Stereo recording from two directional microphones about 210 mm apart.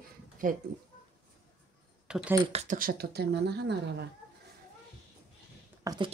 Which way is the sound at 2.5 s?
40° right (ahead or behind).